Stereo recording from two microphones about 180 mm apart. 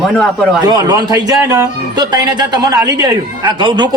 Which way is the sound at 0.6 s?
20° right (ahead or behind).